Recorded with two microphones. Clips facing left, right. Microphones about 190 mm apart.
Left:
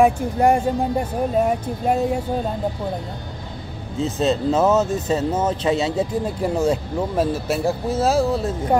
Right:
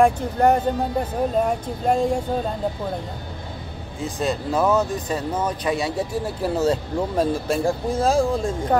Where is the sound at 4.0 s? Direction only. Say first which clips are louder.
Left 5 dB; 25° left (ahead or behind).